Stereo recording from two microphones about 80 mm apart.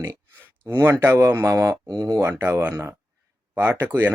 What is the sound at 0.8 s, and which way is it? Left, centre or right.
Speech, right.